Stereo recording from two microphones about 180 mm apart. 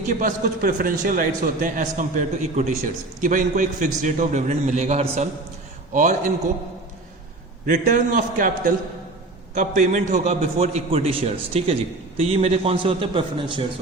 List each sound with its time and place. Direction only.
0.1 s a man's voice: 45° right (ahead or behind)
7.7 s a man's voice: 45° right (ahead or behind); by 13.7 s 30° right (ahead or behind)